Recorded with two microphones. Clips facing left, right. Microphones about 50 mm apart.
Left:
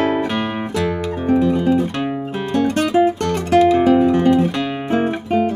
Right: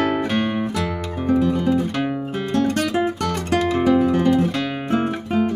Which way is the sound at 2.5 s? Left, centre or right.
Left.